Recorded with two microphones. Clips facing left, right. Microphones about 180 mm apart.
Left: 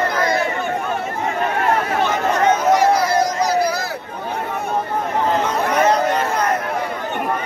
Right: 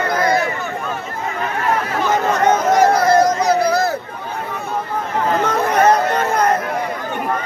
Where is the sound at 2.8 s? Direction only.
50° right (ahead or behind).